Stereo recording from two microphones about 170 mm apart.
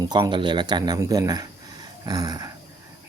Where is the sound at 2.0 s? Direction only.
25° right (ahead or behind).